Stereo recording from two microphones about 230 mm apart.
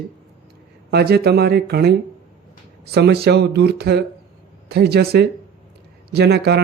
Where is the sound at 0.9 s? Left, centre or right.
Right.